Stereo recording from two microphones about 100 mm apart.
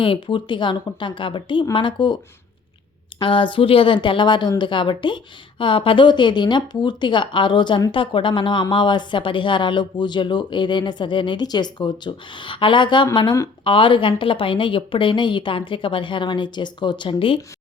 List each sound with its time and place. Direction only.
0.0 s a woman's voice: 60° left (ahead or behind)
3.2 s a woman's voice: 55° left (ahead or behind)